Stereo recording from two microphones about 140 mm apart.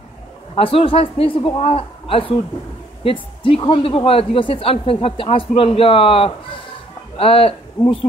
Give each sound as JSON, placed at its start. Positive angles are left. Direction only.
{"t": 0.6, "sound": "a woman's voice", "side_deg": 40}
{"t": 7.8, "sound": "speech", "side_deg": 15}